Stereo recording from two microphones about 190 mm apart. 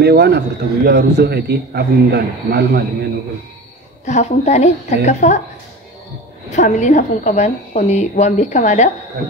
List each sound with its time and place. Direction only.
0.0 s a man's voice: 60° right (ahead or behind)
4.0 s a woman's voice: 35° left (ahead or behind)
6.5 s a woman's voice: 40° left (ahead or behind)